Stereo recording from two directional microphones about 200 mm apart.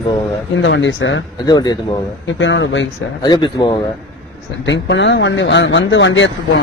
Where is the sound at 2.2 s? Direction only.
65° left (ahead or behind).